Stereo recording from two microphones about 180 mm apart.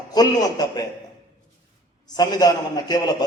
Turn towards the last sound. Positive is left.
turn(degrees=20)  # may be behind; listen again after turning